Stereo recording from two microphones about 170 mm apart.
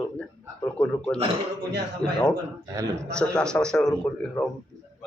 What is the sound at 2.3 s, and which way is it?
Speech, 20° right (ahead or behind).